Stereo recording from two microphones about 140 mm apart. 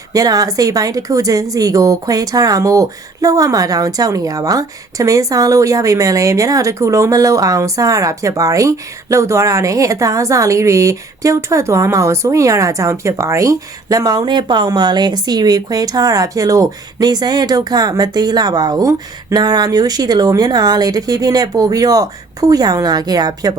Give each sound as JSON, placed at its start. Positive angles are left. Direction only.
{"t": 0.1, "sound": "a woman's voice", "side_deg": -25}